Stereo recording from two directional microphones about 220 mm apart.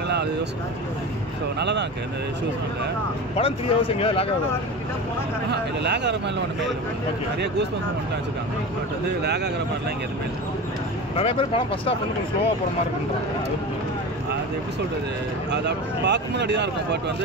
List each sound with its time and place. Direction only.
1.6 s speech: 50° right (ahead or behind)
3.3 s speech: 25° left (ahead or behind)
5.5 s speech: 50° right (ahead or behind)
9.2 s speech: 50° right (ahead or behind)
11.1 s speech: 25° left (ahead or behind)
15.5 s speech: 50° right (ahead or behind)